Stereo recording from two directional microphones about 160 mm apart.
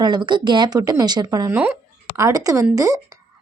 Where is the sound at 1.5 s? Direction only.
10° right (ahead or behind).